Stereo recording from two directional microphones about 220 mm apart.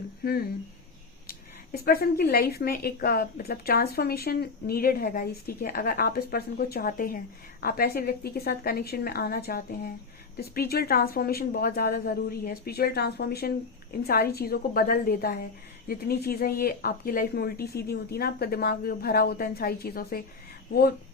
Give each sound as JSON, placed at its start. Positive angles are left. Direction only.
{"t": 1.3, "sound": "speech", "side_deg": 45}